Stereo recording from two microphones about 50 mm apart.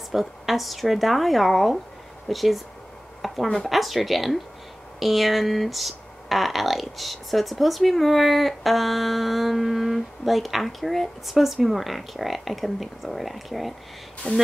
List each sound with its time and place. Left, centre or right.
0.1 s speech: centre
3.2 s a sound: centre
3.6 s speech: centre
14.2 s speech: left